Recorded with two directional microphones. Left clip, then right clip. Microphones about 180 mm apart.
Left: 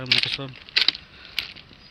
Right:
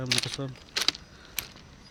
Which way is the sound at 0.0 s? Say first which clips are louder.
Left 7 dB; 5° right (ahead or behind).